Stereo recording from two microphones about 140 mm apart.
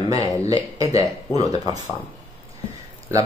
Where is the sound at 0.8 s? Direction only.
45° left (ahead or behind).